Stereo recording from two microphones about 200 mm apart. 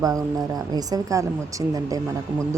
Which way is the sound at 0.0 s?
20° right (ahead or behind).